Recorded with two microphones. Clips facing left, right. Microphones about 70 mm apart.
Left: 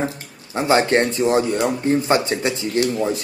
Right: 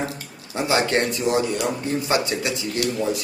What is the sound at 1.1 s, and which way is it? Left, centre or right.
Speech, left.